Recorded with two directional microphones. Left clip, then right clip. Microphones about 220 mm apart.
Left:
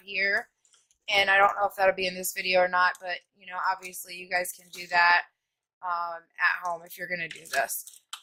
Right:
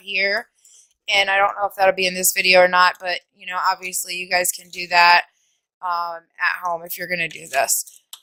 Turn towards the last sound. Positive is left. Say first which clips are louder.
# right 8 dB
turn(degrees=-30)  # may be behind; listen again after turning